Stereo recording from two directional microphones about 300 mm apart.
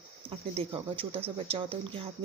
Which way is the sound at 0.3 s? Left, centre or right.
Centre.